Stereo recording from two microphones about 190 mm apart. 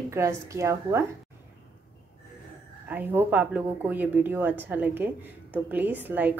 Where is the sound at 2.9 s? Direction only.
10° right (ahead or behind).